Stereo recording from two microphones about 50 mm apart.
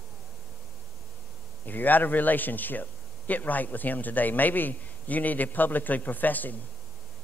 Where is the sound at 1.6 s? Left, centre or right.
Left.